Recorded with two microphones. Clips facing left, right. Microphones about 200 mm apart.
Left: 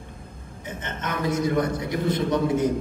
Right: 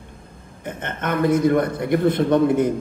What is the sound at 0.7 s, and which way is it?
A man's voice, 55° right (ahead or behind).